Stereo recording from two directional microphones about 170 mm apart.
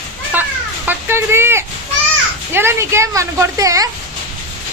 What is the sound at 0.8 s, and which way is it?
Speech, 15° right (ahead or behind).